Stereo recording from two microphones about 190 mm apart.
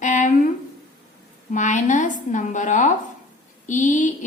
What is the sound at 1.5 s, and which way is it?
A woman's voice, 40° left (ahead or behind).